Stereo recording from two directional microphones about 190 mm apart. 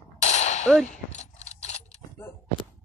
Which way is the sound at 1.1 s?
35° left (ahead or behind).